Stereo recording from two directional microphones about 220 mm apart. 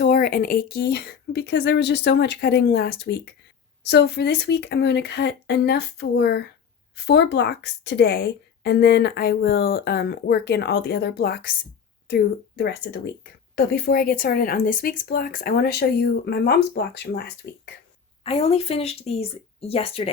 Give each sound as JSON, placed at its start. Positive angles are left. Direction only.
{"t": 0.0, "sound": "a woman's voice", "side_deg": 40}
{"t": 18.2, "sound": "speech", "side_deg": 25}